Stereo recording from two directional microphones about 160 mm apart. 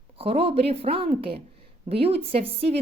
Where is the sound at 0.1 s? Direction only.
35° right (ahead or behind).